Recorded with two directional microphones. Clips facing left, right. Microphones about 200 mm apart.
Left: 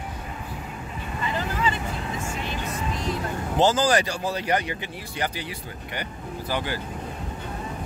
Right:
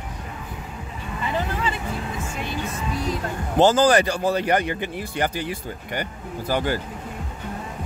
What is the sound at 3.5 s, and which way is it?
Speech, 55° right (ahead or behind).